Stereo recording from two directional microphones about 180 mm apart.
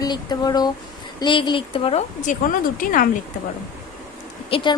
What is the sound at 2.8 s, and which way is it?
Speech, 50° left (ahead or behind).